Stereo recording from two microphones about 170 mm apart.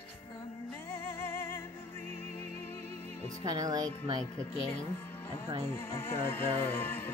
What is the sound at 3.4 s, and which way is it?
Speech, 25° right (ahead or behind).